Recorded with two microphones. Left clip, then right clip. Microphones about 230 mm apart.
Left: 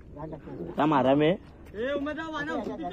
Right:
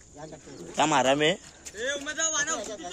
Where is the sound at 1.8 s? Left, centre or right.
Left.